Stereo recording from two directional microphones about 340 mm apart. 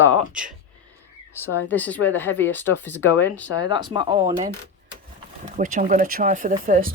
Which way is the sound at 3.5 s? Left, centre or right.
Centre.